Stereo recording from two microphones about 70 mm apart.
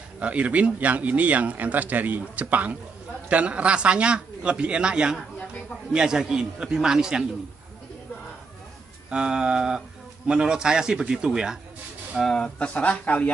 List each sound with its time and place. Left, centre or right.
0.2 s a man's voice: centre
9.1 s a man's voice: centre
12.2 s speech: centre
12.5 s speech: centre